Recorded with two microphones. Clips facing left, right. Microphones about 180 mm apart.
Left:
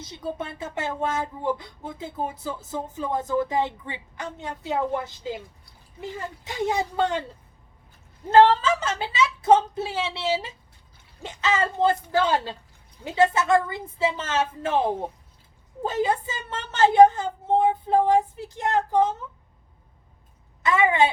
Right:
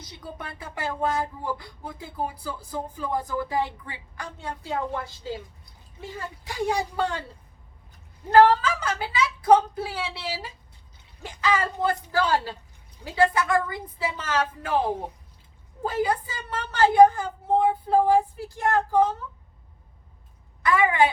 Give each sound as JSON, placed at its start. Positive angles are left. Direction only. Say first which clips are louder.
{"t": 0.0, "sound": "speech", "louder": "left 7 dB", "side_deg": 25}
{"t": 8.3, "sound": "speech", "louder": "left 1 dB", "side_deg": 25}
{"t": 20.6, "sound": "a woman's voice", "louder": "left 1 dB", "side_deg": 20}